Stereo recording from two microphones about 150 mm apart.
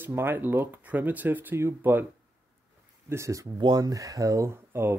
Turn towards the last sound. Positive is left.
turn(degrees=-15)  # may be behind; listen again after turning